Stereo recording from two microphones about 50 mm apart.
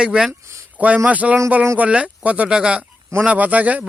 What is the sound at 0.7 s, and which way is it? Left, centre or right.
Speech, right.